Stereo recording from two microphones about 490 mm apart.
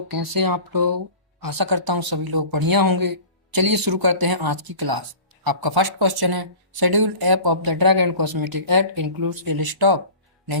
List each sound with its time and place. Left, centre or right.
0.1 s speech: right